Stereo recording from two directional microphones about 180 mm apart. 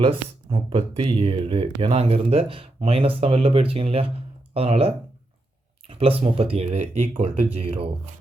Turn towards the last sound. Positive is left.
turn(degrees=-30)  # may be behind; listen again after turning